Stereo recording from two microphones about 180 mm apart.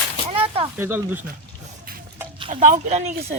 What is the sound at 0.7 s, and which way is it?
Speech, 10° right (ahead or behind).